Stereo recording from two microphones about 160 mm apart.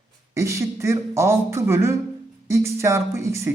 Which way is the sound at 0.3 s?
20° right (ahead or behind).